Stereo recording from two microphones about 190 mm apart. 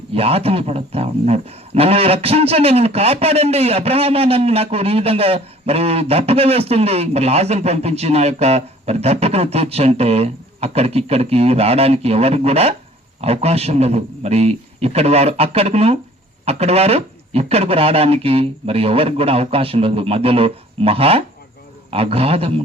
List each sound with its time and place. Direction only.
0.1 s speech: 30° right (ahead or behind)